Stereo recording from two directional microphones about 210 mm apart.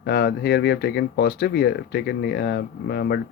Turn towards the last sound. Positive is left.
turn(degrees=50)  # may be behind; listen again after turning